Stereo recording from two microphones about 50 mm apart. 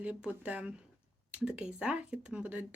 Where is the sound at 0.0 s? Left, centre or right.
Right.